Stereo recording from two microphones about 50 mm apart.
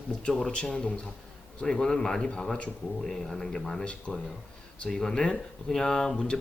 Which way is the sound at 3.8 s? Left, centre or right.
Left.